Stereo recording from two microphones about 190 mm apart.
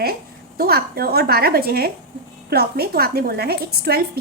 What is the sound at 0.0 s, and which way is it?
A woman's voice, 55° right (ahead or behind).